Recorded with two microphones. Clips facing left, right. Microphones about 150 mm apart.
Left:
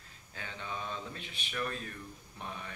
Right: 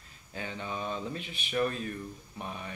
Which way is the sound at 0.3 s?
15° right (ahead or behind).